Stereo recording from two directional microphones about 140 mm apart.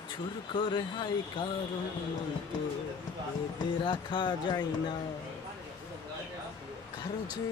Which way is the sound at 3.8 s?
35° left (ahead or behind).